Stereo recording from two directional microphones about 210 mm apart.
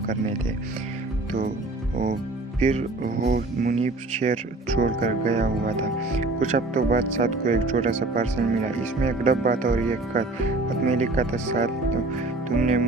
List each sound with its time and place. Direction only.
2.6 s speech: 35° right (ahead or behind)